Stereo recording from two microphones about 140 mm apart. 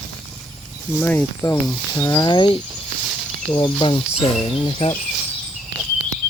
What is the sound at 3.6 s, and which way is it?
Speech, 35° left (ahead or behind).